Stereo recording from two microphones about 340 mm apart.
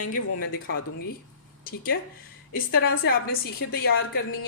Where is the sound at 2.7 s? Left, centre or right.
Left.